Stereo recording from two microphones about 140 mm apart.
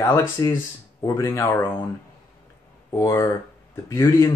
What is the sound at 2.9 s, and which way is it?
Speech, 20° left (ahead or behind).